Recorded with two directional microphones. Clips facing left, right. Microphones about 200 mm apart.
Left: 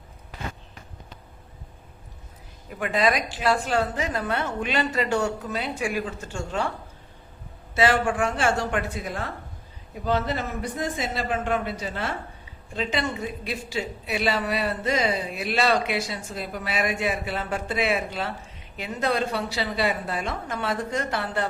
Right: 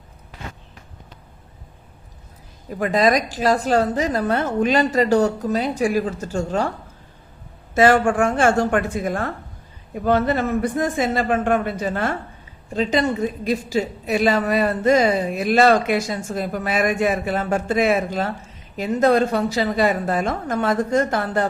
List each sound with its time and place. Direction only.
2.6 s a woman's voice: 40° right (ahead or behind)
7.8 s a woman's voice: 50° right (ahead or behind)
12.7 s a woman's voice: 40° right (ahead or behind)